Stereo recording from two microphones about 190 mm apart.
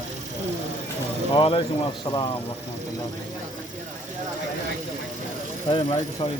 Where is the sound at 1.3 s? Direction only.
30° left (ahead or behind).